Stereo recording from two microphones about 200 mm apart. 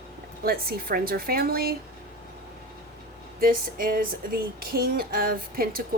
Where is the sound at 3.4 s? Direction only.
45° right (ahead or behind).